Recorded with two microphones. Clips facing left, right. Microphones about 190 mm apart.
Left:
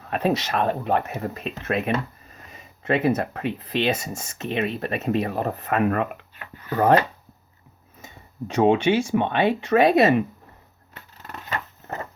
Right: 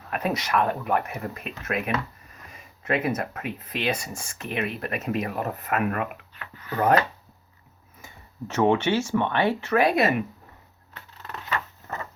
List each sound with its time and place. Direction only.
0.1 s speech: 30° left (ahead or behind)
8.0 s speech: 15° left (ahead or behind)
11.4 s a sound: 35° left (ahead or behind)